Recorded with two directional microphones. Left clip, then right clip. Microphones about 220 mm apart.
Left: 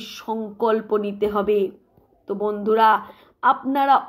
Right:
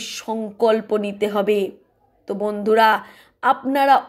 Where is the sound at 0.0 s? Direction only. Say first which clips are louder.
Right 2 dB; 25° right (ahead or behind).